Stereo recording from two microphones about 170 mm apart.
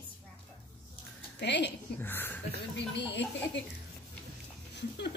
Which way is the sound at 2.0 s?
10° left (ahead or behind).